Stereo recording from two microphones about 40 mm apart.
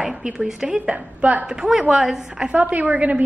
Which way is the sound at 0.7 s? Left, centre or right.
Right.